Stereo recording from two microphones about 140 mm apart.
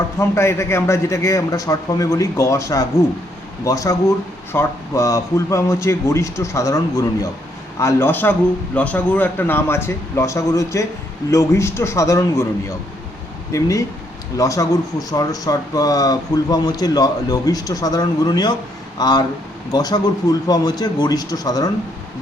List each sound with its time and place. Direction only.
0.2 s a man's voice: 20° left (ahead or behind)